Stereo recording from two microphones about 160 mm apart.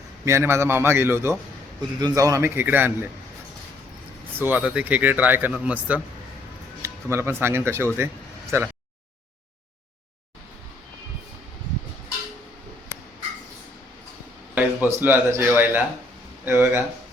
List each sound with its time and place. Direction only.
0.3 s speech: 15° right (ahead or behind)
4.4 s speech: 10° right (ahead or behind)
7.9 s a sound: 15° right (ahead or behind)
14.5 s a man's voice: 10° right (ahead or behind)